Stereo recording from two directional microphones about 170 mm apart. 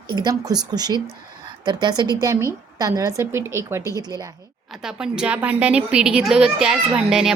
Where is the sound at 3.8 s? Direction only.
20° left (ahead or behind).